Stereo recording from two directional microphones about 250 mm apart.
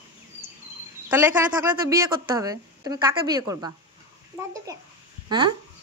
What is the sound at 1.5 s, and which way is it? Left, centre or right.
Speech, centre.